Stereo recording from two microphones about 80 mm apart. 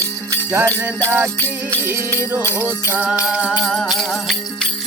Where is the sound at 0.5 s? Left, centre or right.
Right.